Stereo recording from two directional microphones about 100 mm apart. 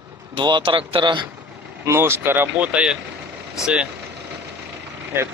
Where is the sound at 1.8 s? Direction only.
25° right (ahead or behind).